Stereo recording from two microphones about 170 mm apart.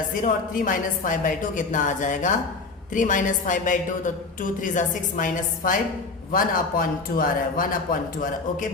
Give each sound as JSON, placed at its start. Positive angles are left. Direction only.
{"t": 0.1, "sound": "a woman's voice", "side_deg": 55}